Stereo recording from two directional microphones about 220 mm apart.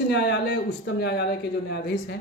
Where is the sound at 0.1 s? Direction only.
50° left (ahead or behind).